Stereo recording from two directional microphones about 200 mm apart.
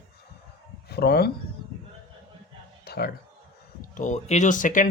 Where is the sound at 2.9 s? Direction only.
50° left (ahead or behind).